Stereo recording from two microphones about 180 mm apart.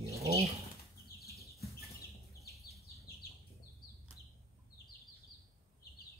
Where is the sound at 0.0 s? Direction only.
15° right (ahead or behind).